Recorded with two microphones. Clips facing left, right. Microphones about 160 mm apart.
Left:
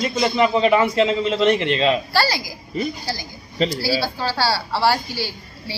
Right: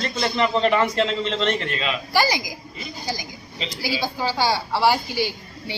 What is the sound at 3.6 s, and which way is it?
Speech, 45° left (ahead or behind).